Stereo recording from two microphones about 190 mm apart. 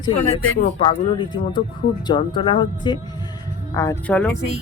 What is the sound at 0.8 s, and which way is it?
Speech, 25° left (ahead or behind).